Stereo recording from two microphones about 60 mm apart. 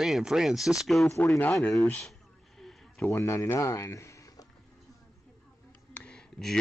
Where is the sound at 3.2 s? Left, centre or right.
Left.